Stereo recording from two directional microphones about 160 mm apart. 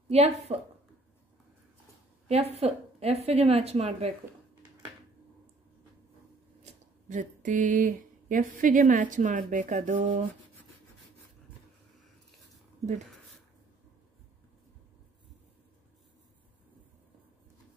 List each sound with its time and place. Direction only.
0.1 s a woman's voice: 40° right (ahead or behind)
2.2 s a woman's voice: 40° right (ahead or behind)
6.6 s speech: 50° right (ahead or behind)